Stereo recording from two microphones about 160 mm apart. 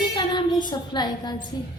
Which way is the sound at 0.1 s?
30° left (ahead or behind).